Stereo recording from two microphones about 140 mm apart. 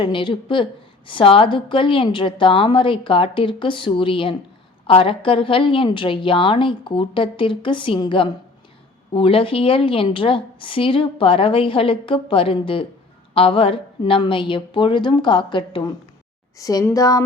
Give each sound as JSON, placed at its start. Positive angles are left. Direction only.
{"t": 0.0, "sound": "a woman's voice", "side_deg": 35}
{"t": 16.6, "sound": "speech", "side_deg": 25}